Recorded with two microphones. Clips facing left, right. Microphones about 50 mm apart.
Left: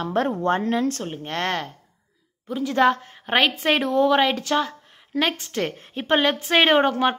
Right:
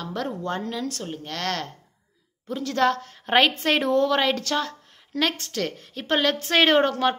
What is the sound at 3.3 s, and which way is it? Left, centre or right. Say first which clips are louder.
A woman's voice: even; centre.